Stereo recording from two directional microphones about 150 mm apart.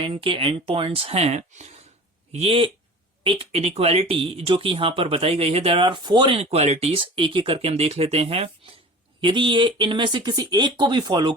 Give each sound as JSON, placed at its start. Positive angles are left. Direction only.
{"t": 0.0, "sound": "speech", "side_deg": -35}